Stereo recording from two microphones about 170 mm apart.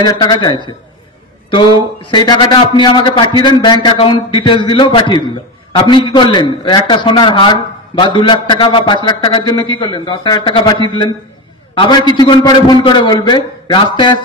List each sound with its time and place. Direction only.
0.0 s a man's voice: 25° left (ahead or behind)